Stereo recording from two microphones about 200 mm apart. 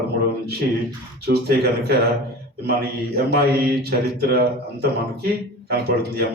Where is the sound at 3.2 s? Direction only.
55° right (ahead or behind).